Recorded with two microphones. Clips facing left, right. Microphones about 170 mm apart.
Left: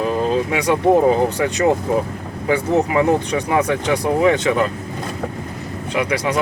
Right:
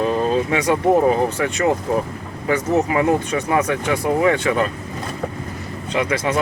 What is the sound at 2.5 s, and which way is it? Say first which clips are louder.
Speech: left 1 dB; 25° left (ahead or behind).